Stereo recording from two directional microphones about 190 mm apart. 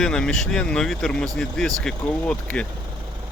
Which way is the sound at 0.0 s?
5° left (ahead or behind).